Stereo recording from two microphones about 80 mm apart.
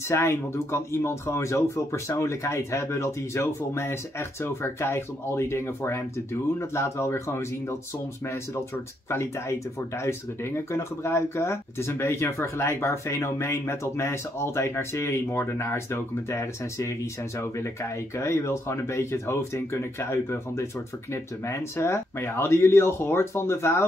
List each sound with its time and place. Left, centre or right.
0.1 s speech: left
9.1 s speech: left
18.1 s speech: left